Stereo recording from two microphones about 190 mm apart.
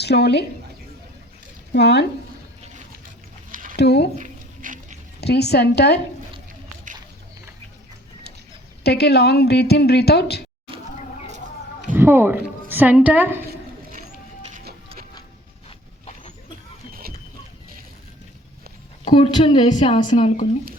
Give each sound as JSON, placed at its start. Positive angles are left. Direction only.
{"t": 0.0, "sound": "a woman's voice", "side_deg": 60}
{"t": 1.7, "sound": "a woman's voice", "side_deg": 60}
{"t": 3.5, "sound": "a sound", "side_deg": -45}
{"t": 3.8, "sound": "a woman's voice", "side_deg": 60}
{"t": 4.2, "sound": "dog", "side_deg": -40}
{"t": 5.2, "sound": "a woman's voice", "side_deg": 60}
{"t": 8.8, "sound": "a woman's voice", "side_deg": 60}
{"t": 11.9, "sound": "a woman's voice", "side_deg": -10}
{"t": 14.5, "sound": "music", "side_deg": -55}
{"t": 16.9, "sound": "a sound", "side_deg": -50}
{"t": 19.0, "sound": "a woman's voice", "side_deg": 30}